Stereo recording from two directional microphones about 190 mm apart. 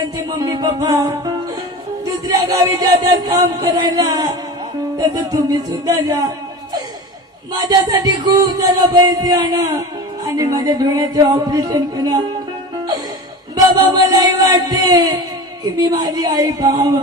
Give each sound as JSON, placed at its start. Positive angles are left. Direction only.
{"t": 0.2, "sound": "music", "side_deg": -20}
{"t": 7.6, "sound": "music", "side_deg": -20}
{"t": 13.7, "sound": "music", "side_deg": -20}